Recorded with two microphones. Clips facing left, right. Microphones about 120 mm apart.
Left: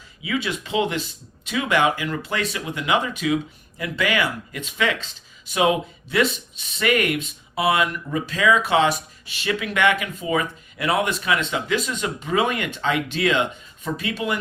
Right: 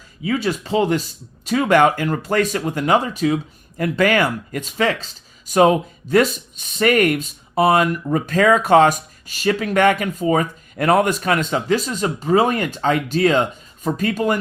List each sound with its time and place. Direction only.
0.2 s speech: 40° right (ahead or behind)